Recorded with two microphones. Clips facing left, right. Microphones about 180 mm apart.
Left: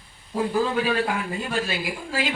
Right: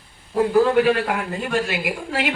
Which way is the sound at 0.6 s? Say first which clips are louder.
Right 6 dB; 65° right (ahead or behind).